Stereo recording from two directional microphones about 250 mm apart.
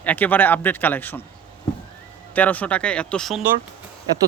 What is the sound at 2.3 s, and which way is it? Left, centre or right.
Speech, centre.